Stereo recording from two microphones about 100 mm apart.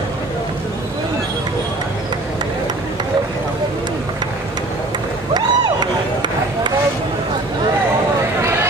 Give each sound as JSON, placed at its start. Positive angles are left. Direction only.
{"t": 5.3, "sound": "run", "side_deg": -45}